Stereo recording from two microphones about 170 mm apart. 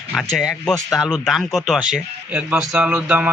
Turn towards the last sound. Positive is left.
turn(degrees=-10)  # may be behind; listen again after turning